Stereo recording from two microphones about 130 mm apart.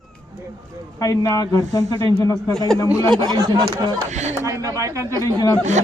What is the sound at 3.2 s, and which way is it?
Speech, 30° right (ahead or behind).